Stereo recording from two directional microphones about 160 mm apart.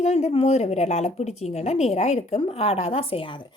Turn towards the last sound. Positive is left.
turn(degrees=30)  # may be behind; listen again after turning